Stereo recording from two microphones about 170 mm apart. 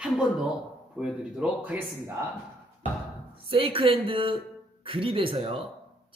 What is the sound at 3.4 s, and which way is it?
Speech, 30° right (ahead or behind).